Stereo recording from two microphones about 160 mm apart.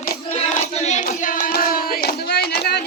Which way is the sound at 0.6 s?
45° left (ahead or behind).